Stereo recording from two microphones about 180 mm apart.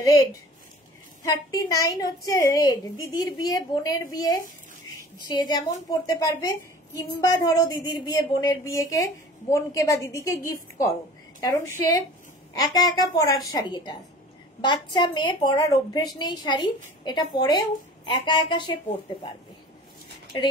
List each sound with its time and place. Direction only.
1.2 s a woman's voice: 20° left (ahead or behind)
20.3 s a woman's voice: 25° left (ahead or behind)